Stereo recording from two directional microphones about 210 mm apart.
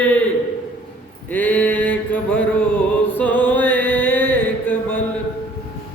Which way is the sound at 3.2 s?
10° left (ahead or behind).